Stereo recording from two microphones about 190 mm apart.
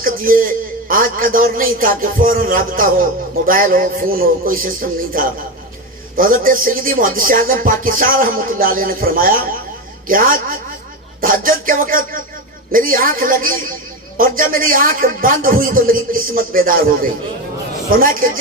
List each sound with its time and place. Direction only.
0.0 s a man's voice: 50° right (ahead or behind)
0.9 s music: 50° right (ahead or behind)